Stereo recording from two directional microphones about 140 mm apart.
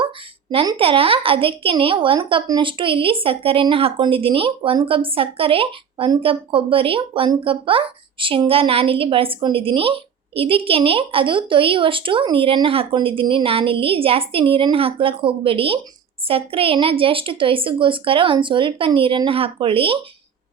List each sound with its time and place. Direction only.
0.5 s speech: 40° right (ahead or behind)